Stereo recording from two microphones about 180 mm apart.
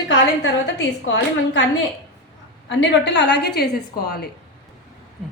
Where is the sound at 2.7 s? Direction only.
75° left (ahead or behind).